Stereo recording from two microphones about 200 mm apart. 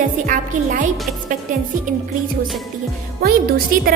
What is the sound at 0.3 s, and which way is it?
Speech, 40° right (ahead or behind).